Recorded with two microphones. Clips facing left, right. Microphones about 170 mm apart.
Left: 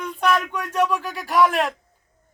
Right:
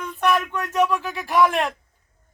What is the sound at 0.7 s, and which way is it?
Speech, 10° right (ahead or behind).